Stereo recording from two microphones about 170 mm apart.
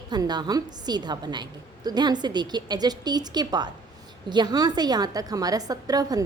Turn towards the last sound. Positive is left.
turn(degrees=-20)  # may be behind; listen again after turning